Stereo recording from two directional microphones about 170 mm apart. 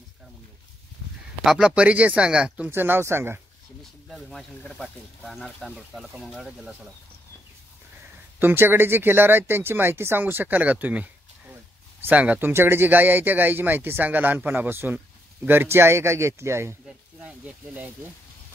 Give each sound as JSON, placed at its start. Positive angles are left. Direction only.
{"t": 1.4, "sound": "speech", "side_deg": -5}
{"t": 4.1, "sound": "speech", "side_deg": 0}
{"t": 8.4, "sound": "speech", "side_deg": -10}
{"t": 16.8, "sound": "speech", "side_deg": -5}